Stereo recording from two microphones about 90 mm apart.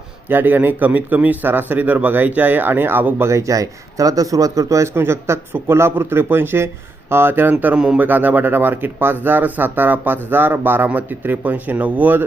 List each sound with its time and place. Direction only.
0.3 s speech: 20° right (ahead or behind)
3.2 s speech: 35° right (ahead or behind)
7.6 s speech: 15° right (ahead or behind)